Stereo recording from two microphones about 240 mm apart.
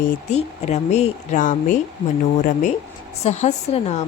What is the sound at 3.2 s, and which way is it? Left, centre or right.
Speech, left.